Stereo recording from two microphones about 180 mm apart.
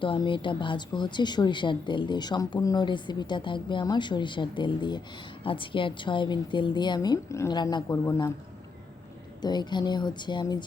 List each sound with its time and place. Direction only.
0.0 s a woman's voice: 30° left (ahead or behind)
9.4 s a woman's voice: 25° left (ahead or behind)